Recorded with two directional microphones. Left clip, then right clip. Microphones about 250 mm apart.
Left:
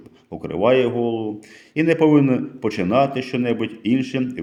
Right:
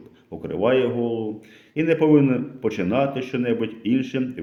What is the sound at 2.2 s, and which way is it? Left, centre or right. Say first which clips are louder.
Speech: left 2 dB; left.